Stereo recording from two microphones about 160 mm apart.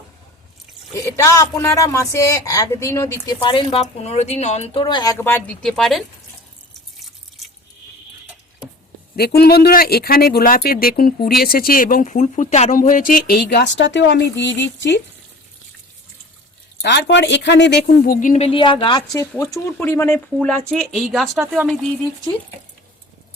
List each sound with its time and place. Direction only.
0.9 s speech: 20° left (ahead or behind)
3.4 s speech: 35° left (ahead or behind)
5.1 s speech: 15° left (ahead or behind)
5.6 s speech: centre (ahead or behind)
9.1 s speech: 75° left (ahead or behind)
16.8 s speech: 90° left; by 18.4 s 55° left (ahead or behind)
18.4 s speech: 35° left (ahead or behind)
19.4 s speech: 20° left (ahead or behind); by 21.8 s centre (ahead or behind)